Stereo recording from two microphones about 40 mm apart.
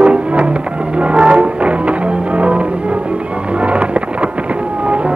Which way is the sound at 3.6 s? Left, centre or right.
Right.